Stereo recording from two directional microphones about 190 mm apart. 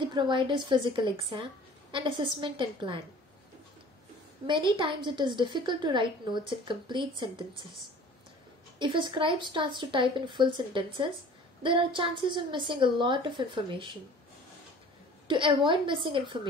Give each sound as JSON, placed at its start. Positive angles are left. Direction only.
{"t": 0.0, "sound": "a woman's voice", "side_deg": -25}
{"t": 4.5, "sound": "a woman's voice", "side_deg": -25}
{"t": 8.7, "sound": "a woman's voice", "side_deg": -25}
{"t": 15.2, "sound": "a woman's voice", "side_deg": -25}